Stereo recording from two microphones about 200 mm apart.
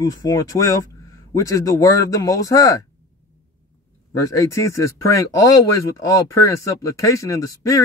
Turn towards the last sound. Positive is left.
turn(degrees=15)  # may be behind; listen again after turning